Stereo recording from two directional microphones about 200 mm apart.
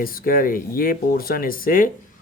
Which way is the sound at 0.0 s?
45° left (ahead or behind).